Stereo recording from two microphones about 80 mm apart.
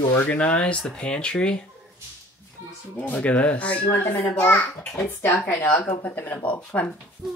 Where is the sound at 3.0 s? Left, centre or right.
Centre.